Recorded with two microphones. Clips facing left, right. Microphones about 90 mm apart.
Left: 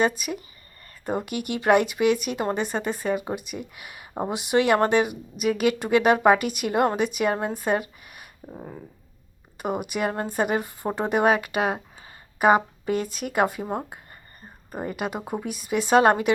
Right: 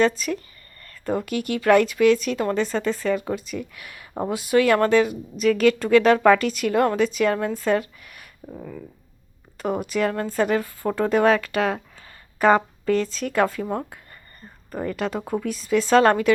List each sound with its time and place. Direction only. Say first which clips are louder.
0.0 s a woman's voice: right 3 dB; 15° left (ahead or behind)
7.5 s a sound: right 3 dB; 15° left (ahead or behind)
9.6 s a woman's voice: right 3 dB; 15° left (ahead or behind)